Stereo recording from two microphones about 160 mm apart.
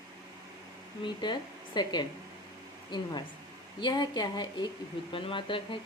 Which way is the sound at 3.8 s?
25° left (ahead or behind).